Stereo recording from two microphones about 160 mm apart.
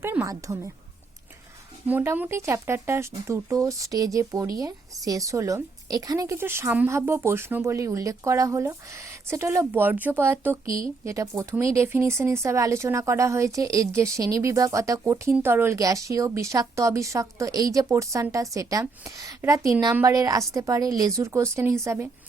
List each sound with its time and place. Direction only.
0.0 s speech: 15° right (ahead or behind)
1.9 s speech: 10° right (ahead or behind)